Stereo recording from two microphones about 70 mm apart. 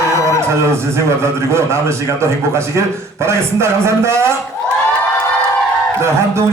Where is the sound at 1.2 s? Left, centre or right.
Right.